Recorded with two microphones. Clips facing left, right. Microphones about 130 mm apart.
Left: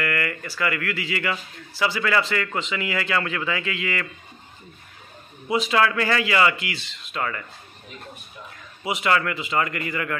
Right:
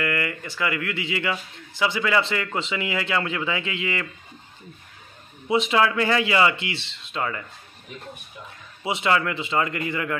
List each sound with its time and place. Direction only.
0.0 s speech: 20° right (ahead or behind)
5.5 s speech: 20° right (ahead or behind)
8.8 s speech: 25° right (ahead or behind)